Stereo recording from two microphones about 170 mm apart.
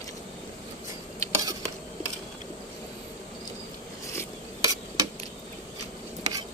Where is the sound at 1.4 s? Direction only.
20° right (ahead or behind).